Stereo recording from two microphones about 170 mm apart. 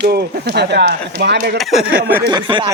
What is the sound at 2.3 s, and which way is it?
Speech, 25° right (ahead or behind).